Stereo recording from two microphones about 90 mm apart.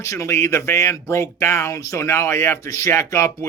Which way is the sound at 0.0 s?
35° left (ahead or behind).